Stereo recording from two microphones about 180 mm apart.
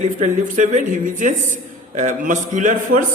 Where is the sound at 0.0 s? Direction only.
40° right (ahead or behind).